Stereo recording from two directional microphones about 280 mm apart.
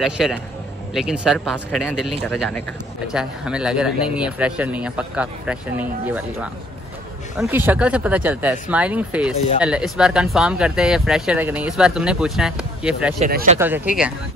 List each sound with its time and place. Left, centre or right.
0.0 s speech: centre
13.2 s speech: right
13.6 s speech: centre